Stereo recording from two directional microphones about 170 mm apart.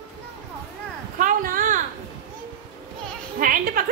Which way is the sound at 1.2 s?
55° right (ahead or behind).